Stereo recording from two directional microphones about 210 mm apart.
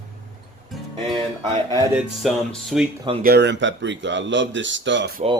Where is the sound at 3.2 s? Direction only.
50° right (ahead or behind).